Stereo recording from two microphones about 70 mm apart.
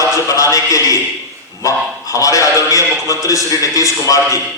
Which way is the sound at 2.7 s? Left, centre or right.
Left.